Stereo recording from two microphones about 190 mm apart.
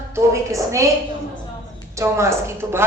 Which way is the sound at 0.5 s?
15° right (ahead or behind).